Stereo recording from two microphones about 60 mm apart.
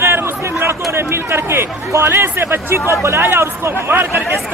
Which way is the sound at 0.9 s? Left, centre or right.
Right.